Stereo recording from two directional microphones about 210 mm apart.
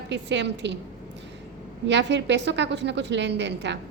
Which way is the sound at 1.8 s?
55° right (ahead or behind).